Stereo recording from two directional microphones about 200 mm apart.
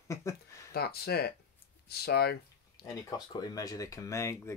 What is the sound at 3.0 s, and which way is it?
Speech, 20° left (ahead or behind).